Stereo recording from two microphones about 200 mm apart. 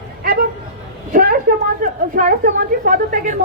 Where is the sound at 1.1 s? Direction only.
45° right (ahead or behind).